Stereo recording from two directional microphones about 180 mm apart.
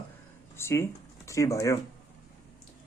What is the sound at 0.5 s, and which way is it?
Speech, 15° left (ahead or behind).